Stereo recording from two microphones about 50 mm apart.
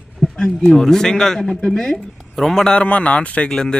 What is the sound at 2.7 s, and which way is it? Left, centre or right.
A man's voice, left.